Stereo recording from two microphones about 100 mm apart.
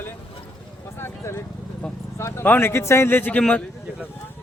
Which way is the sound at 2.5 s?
20° left (ahead or behind).